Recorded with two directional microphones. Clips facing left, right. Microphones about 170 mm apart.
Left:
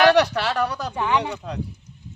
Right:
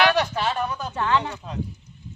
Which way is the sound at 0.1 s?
75° left (ahead or behind).